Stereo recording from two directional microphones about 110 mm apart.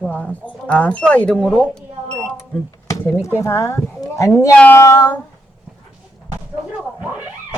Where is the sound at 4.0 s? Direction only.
30° left (ahead or behind).